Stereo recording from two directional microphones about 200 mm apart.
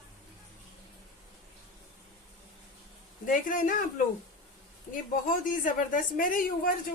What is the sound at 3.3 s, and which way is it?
Speech, 40° left (ahead or behind).